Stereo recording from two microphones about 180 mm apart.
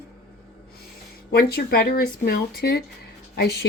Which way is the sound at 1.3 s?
60° left (ahead or behind).